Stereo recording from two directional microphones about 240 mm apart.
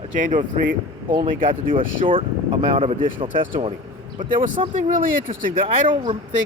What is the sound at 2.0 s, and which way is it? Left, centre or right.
Speech, right.